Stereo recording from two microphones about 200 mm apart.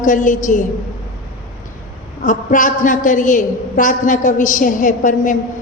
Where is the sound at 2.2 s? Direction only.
40° left (ahead or behind).